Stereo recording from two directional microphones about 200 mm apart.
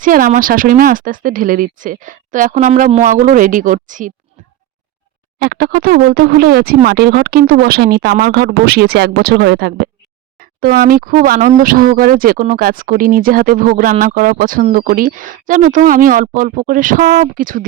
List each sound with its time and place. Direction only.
0.0 s speech: 45° right (ahead or behind)
5.4 s speech: 50° right (ahead or behind)